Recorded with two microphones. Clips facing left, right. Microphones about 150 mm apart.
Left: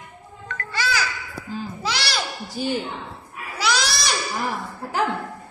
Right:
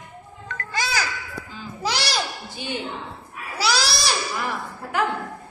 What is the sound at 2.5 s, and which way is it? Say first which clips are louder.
Speech: left 8 dB; 40° left (ahead or behind).